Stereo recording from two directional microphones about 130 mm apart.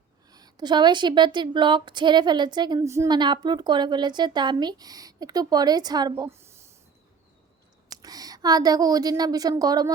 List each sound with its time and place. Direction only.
0.3 s speech: 30° right (ahead or behind)
2.8 s a woman's voice: 20° right (ahead or behind)
3.1 s speech: 35° right (ahead or behind)
6.2 s a sound: 20° right (ahead or behind)
7.9 s a woman's voice: 30° right (ahead or behind)